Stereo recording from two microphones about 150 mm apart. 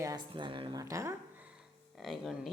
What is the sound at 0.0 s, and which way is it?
Speech, 25° right (ahead or behind).